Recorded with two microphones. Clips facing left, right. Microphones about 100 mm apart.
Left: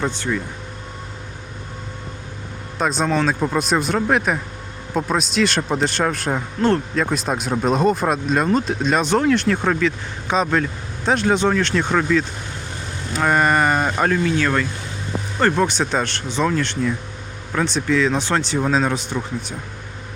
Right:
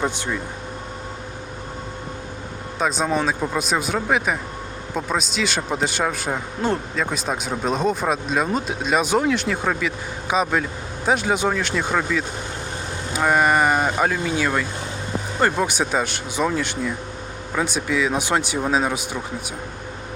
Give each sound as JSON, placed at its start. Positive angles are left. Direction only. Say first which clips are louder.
{"t": 0.0, "sound": "speech", "louder": "left 1 dB", "side_deg": -15}
{"t": 2.7, "sound": "speech", "louder": "left 2 dB", "side_deg": 0}